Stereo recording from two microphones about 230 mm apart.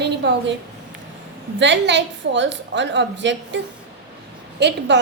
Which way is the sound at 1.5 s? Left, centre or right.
Right.